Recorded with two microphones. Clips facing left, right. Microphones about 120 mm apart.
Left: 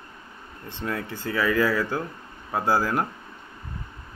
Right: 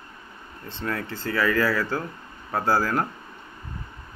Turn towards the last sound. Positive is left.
turn(degrees=15)  # may be behind; listen again after turning